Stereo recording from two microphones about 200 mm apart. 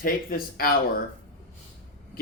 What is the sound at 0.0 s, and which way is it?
Speech, 45° left (ahead or behind).